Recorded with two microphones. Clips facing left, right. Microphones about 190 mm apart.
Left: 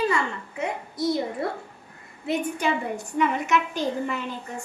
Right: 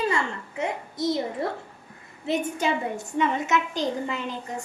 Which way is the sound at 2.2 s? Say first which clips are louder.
Even; 25° right (ahead or behind).